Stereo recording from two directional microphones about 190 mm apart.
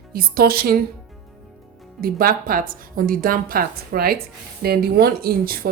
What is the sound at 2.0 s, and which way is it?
A woman's voice, 50° right (ahead or behind).